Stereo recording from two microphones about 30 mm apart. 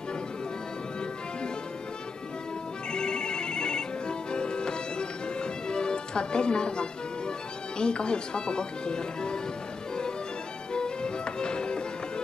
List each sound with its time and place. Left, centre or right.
2.9 s ringtone: left
10.7 s music: left